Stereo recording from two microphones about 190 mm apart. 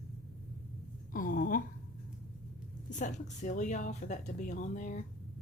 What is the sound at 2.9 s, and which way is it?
Speech, 40° left (ahead or behind).